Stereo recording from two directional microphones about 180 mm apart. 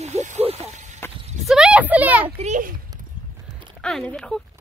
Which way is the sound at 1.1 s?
35° right (ahead or behind).